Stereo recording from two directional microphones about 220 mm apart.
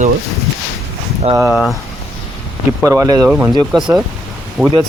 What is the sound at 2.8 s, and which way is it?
Speech, 15° right (ahead or behind).